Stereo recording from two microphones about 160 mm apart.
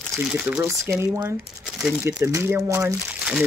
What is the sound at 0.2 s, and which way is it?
Speech, 10° right (ahead or behind).